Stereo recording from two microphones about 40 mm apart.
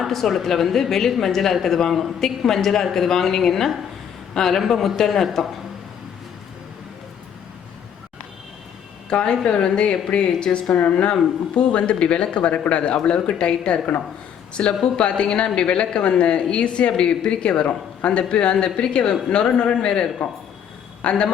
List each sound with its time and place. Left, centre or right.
0.1 s a man's voice: centre
9.0 s speech: left
10.8 s a woman's voice: left